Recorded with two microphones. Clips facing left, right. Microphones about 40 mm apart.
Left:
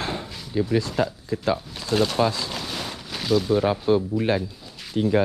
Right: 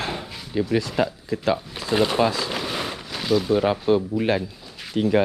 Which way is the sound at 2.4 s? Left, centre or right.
Centre.